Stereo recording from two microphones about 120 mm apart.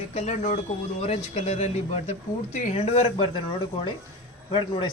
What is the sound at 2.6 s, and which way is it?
Speech, 75° left (ahead or behind).